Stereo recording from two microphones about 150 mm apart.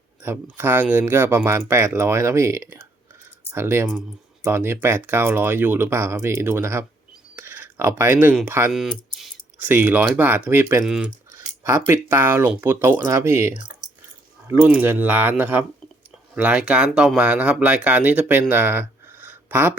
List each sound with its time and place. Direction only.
0.2 s speech: 15° right (ahead or behind)
7.3 s a sound: 15° right (ahead or behind)
8.4 s speech: 15° right (ahead or behind)
8.7 s a sound: centre (ahead or behind)
9.6 s speech: 15° right (ahead or behind)
11.3 s speech: 20° right (ahead or behind)